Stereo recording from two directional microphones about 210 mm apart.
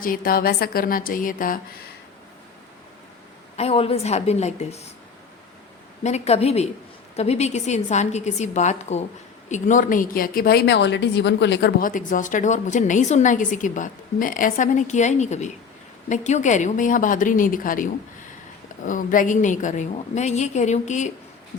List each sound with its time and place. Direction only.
0.0 s a woman's voice: 45° left (ahead or behind)
3.6 s a woman's voice: 30° left (ahead or behind)
6.0 s a woman's voice: 30° left (ahead or behind)
18.9 s a woman's voice: 40° left (ahead or behind)